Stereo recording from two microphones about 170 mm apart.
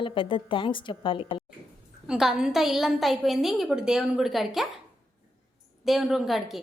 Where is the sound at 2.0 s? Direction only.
5° right (ahead or behind).